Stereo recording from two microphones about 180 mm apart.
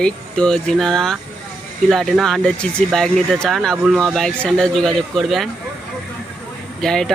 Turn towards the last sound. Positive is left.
turn(degrees=5)  # may be behind; listen again after turning